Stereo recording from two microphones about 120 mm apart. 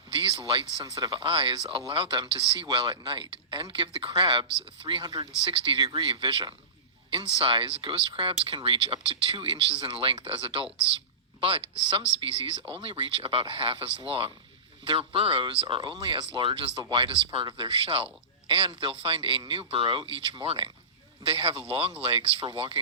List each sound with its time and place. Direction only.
0.1 s speech: 45° right (ahead or behind)
0.9 s speech: 30° right (ahead or behind)
1.1 s speech: 45° right (ahead or behind)